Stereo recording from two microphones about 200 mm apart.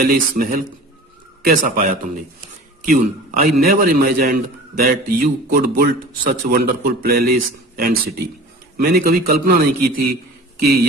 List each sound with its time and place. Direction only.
0.0 s speech: 45° right (ahead or behind)